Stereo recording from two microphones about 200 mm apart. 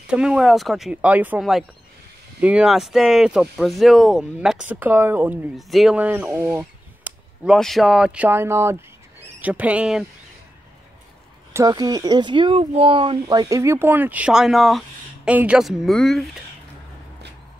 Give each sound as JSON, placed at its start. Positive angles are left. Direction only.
{"t": 0.1, "sound": "speech", "side_deg": -5}
{"t": 11.5, "sound": "speech", "side_deg": -20}